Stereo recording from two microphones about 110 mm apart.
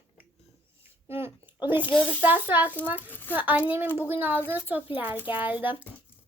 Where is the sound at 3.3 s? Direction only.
15° right (ahead or behind).